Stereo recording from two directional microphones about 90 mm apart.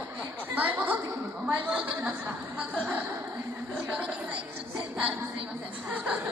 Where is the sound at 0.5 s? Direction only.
20° right (ahead or behind).